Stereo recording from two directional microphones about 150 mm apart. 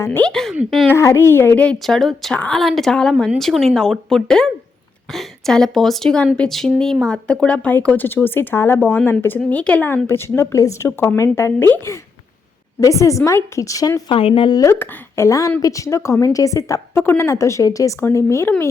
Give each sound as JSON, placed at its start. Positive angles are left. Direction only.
{"t": 0.3, "sound": "a woman's voice", "side_deg": 5}
{"t": 0.9, "sound": "a woman's voice", "side_deg": 20}
{"t": 14.1, "sound": "speech", "side_deg": 35}
{"t": 14.6, "sound": "a woman's voice", "side_deg": 15}